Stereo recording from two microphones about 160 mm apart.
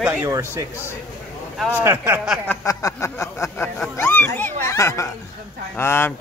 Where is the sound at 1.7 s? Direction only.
15° right (ahead or behind).